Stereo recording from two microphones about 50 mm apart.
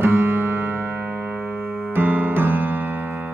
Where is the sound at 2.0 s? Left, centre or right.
Right.